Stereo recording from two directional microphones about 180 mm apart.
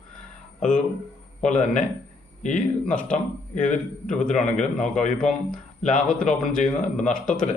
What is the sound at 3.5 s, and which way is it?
A man's voice, 45° left (ahead or behind).